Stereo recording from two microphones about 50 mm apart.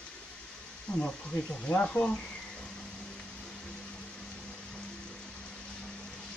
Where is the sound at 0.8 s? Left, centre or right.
Left.